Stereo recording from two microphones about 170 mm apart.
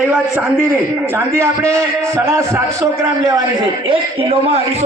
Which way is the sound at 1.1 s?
15° right (ahead or behind).